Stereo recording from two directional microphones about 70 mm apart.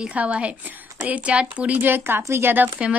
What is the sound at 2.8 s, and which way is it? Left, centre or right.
Speech, centre.